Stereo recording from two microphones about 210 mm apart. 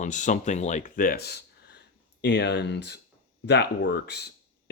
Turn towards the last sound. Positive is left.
turn(degrees=50)  # may be behind; listen again after turning